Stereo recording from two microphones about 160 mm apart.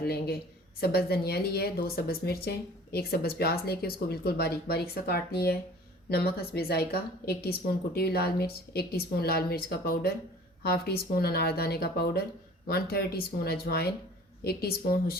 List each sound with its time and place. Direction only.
0.0 s a woman's voice: 80° left